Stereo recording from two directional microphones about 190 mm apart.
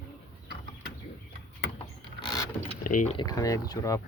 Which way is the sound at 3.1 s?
20° left (ahead or behind).